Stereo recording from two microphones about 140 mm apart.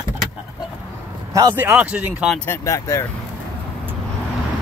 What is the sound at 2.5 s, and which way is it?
Speech, 20° left (ahead or behind).